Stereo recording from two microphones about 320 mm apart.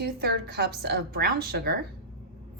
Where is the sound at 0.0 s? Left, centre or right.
Right.